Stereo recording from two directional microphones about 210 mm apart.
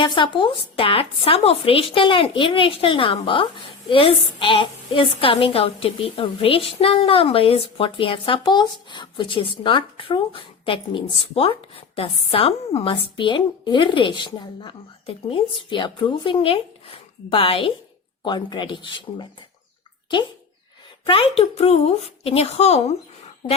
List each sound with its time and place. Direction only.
0.0 s a woman's voice: 25° left (ahead or behind)
21.0 s a woman's voice: 25° left (ahead or behind)